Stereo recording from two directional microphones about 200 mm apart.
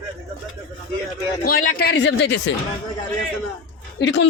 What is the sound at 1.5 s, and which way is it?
Speech, 45° left (ahead or behind).